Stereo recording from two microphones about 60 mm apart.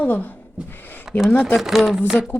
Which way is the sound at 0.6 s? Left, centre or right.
Centre.